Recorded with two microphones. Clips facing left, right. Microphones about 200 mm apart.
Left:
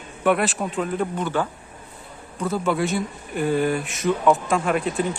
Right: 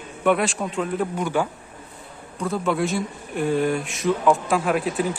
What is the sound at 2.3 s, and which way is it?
A man's voice, centre (ahead or behind).